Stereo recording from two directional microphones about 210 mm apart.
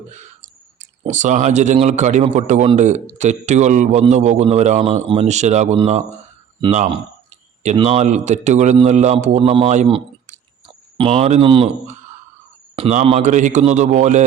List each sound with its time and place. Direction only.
0.1 s a sound: 35° right (ahead or behind)
1.0 s a man's voice: 35° right (ahead or behind)
12.7 s a man's voice: 30° right (ahead or behind)